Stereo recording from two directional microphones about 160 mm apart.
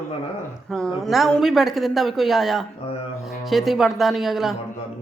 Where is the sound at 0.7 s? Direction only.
5° left (ahead or behind).